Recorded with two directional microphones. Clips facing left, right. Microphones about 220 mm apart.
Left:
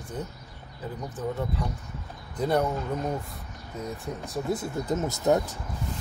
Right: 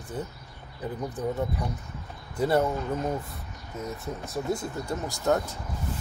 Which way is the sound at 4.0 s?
Centre (ahead or behind).